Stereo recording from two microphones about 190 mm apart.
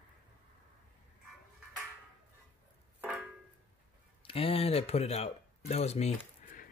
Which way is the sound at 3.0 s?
5° right (ahead or behind).